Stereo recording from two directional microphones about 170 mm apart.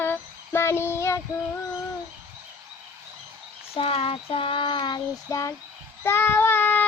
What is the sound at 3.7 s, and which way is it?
Child singing, 35° left (ahead or behind).